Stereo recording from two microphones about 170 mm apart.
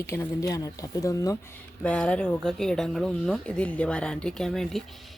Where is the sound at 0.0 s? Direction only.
20° left (ahead or behind).